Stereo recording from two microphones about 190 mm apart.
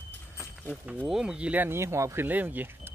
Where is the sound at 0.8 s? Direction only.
5° right (ahead or behind).